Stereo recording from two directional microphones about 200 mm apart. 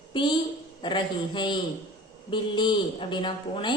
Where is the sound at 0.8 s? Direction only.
25° left (ahead or behind).